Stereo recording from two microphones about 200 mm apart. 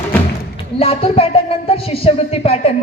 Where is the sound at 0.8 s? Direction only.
30° left (ahead or behind).